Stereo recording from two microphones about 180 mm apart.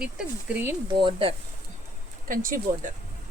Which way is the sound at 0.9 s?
30° right (ahead or behind).